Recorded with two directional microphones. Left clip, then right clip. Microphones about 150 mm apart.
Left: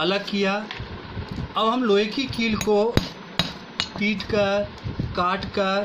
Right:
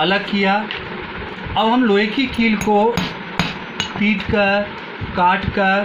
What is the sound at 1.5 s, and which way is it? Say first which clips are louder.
Speech: right 5 dB; 15° left (ahead or behind).